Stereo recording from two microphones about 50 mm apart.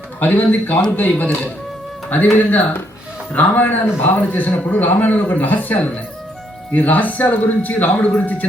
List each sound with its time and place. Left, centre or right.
0.2 s a man's voice: left